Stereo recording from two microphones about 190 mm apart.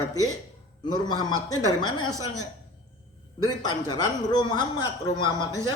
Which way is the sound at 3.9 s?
20° left (ahead or behind).